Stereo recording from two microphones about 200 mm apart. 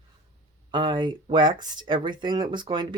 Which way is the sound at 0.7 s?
25° right (ahead or behind).